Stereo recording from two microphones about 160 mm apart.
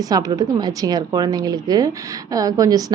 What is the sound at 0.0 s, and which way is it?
A woman's voice, 25° right (ahead or behind).